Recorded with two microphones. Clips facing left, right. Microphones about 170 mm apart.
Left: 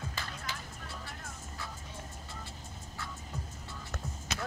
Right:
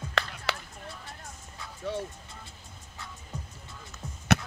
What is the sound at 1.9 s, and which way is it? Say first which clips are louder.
Music: right 15 dB; 75° right (ahead or behind).